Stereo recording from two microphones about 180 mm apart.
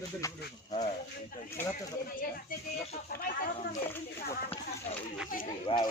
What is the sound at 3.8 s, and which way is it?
Speech, 10° left (ahead or behind).